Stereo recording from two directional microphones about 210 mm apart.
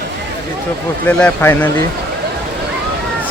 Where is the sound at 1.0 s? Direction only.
10° left (ahead or behind).